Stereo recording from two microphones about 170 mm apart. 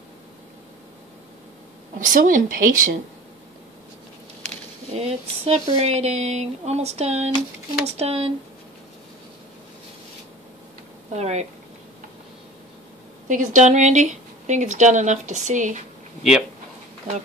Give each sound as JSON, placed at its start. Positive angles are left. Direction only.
{"t": 2.0, "sound": "speech", "side_deg": -50}
{"t": 4.9, "sound": "speech", "side_deg": -35}
{"t": 11.1, "sound": "speech", "side_deg": -40}
{"t": 13.3, "sound": "speech", "side_deg": -45}